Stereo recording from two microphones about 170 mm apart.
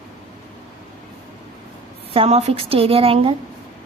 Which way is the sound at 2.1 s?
35° right (ahead or behind).